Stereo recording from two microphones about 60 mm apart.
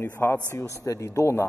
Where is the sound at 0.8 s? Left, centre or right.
Left.